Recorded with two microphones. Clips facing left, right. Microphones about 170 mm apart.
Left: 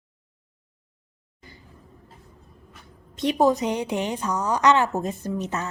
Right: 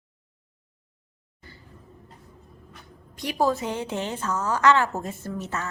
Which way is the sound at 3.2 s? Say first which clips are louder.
Left 4 dB; 20° left (ahead or behind).